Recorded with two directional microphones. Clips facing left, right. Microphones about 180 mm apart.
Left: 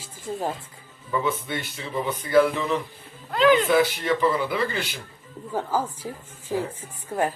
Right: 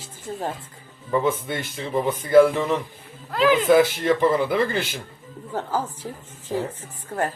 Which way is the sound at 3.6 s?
45° right (ahead or behind).